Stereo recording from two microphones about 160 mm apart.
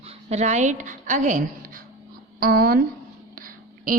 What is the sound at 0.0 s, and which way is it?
A woman's voice, 40° right (ahead or behind).